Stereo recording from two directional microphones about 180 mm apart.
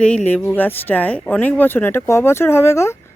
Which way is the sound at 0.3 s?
5° left (ahead or behind).